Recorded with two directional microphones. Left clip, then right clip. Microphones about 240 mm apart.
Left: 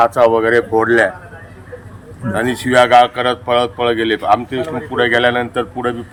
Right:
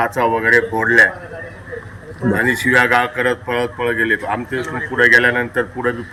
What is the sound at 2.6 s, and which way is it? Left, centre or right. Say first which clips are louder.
Speech: left 6 dB; centre.